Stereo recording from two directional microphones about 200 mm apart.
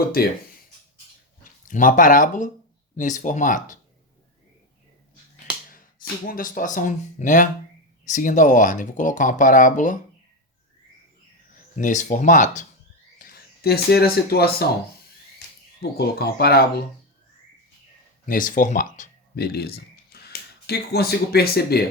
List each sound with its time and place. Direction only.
1.6 s speech: 40° left (ahead or behind)
5.7 s speech: 45° left (ahead or behind)
11.5 s speech: 40° left (ahead or behind)
15.8 s speech: 50° left (ahead or behind)
18.3 s speech: 45° left (ahead or behind)
19.4 s speech: 50° left (ahead or behind)